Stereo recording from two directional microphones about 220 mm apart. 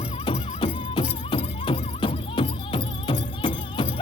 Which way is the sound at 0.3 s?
20° left (ahead or behind).